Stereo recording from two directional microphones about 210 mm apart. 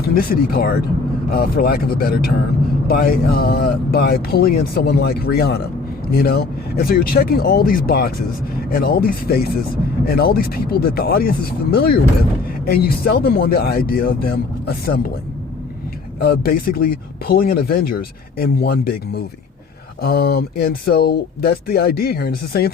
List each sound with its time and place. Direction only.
0.1 s speech: 45° left (ahead or behind)
16.2 s speech: 45° left (ahead or behind)